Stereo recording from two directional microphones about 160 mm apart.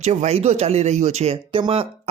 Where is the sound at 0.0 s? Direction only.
45° right (ahead or behind).